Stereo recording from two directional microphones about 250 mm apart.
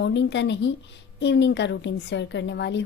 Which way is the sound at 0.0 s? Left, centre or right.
Left.